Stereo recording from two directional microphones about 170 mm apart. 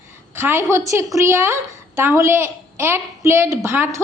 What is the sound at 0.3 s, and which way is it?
A woman's voice, 15° right (ahead or behind).